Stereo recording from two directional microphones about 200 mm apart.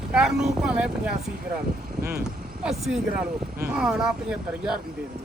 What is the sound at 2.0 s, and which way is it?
Speech, 50° right (ahead or behind).